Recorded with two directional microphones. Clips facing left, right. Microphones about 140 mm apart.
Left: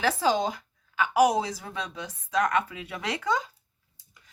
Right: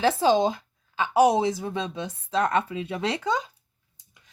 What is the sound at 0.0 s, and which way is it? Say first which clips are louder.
A woman's voice: right 4 dB; 25° right (ahead or behind).